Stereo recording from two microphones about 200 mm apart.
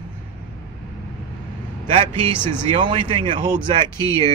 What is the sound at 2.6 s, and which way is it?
Speech, 25° right (ahead or behind).